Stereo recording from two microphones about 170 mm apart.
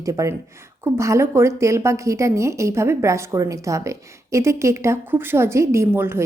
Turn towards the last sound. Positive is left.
turn(degrees=-15)  # may be behind; listen again after turning